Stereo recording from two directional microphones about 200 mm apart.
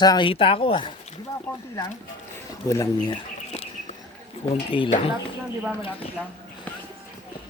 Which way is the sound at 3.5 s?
30° left (ahead or behind).